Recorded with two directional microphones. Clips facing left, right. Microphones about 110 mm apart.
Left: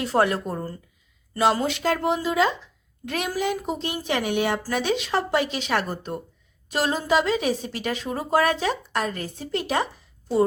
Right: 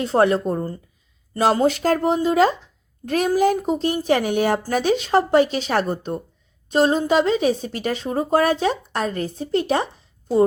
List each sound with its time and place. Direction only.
0.0 s a woman's voice: 30° right (ahead or behind)
1.4 s a woman's voice: 35° right (ahead or behind)